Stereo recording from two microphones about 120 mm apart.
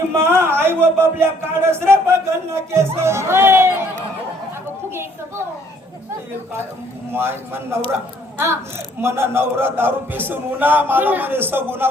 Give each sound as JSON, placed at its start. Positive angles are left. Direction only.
{"t": 0.1, "sound": "speech", "side_deg": -20}
{"t": 7.1, "sound": "speech", "side_deg": -20}
{"t": 9.0, "sound": "a man's voice", "side_deg": -20}